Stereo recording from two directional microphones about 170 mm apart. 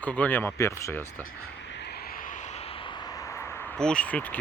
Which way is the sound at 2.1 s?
50° left (ahead or behind).